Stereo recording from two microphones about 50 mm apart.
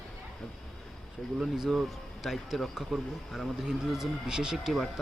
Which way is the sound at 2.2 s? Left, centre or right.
Centre.